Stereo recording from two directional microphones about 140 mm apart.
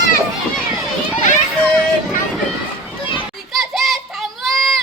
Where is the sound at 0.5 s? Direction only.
Centre (ahead or behind).